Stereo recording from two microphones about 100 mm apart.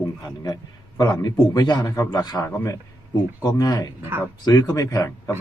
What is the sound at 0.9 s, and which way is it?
Speech, 40° left (ahead or behind).